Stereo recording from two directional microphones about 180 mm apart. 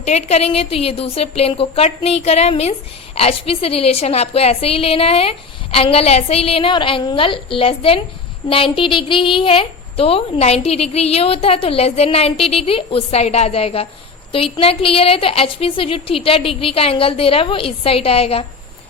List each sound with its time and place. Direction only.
0.0 s a woman's voice: 40° left (ahead or behind)